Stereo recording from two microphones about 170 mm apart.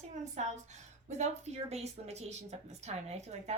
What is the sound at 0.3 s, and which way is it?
A woman's voice, 45° right (ahead or behind).